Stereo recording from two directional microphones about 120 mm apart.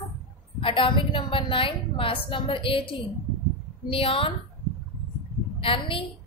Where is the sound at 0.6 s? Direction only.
45° left (ahead or behind).